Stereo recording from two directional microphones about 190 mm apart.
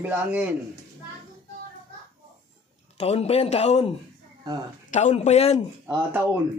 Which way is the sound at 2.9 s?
35° left (ahead or behind).